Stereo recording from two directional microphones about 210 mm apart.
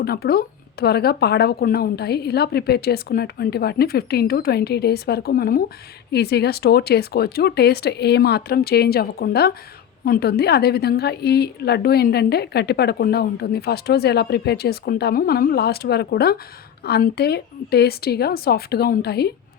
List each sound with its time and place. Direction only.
0.0 s speech: 45° left (ahead or behind)